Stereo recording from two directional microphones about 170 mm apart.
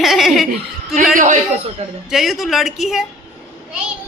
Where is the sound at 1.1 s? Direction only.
50° right (ahead or behind).